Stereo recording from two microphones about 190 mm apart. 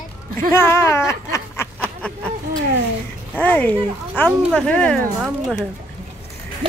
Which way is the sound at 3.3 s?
10° left (ahead or behind).